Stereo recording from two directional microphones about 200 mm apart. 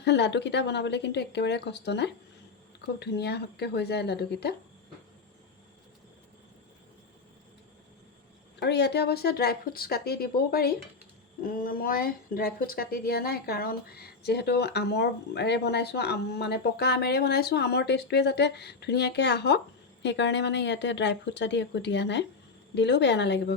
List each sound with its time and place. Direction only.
0.0 s speech: 60° left (ahead or behind)
8.6 s speech: 55° left (ahead or behind)